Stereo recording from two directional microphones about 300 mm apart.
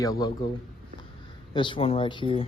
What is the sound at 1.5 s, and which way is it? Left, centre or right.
Speech, centre.